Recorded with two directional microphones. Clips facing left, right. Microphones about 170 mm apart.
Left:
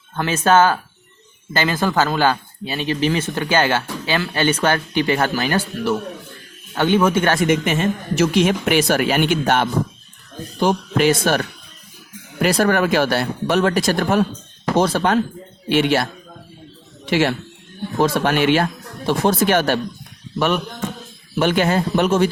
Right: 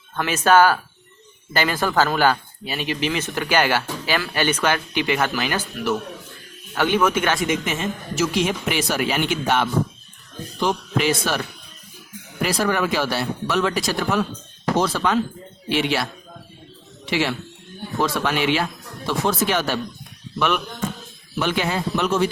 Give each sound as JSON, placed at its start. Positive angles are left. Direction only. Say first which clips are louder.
{"t": 0.2, "sound": "speech", "louder": "left 1 dB", "side_deg": 30}
{"t": 2.0, "sound": "speech", "louder": "right 1 dB", "side_deg": 20}
{"t": 6.7, "sound": "speech", "louder": "left 3 dB", "side_deg": 25}
{"t": 7.3, "sound": "speech", "louder": "left 6 dB", "side_deg": 55}
{"t": 17.1, "sound": "speech", "louder": "left 5 dB", "side_deg": 50}
{"t": 21.3, "sound": "speech", "louder": "left 6 dB", "side_deg": 55}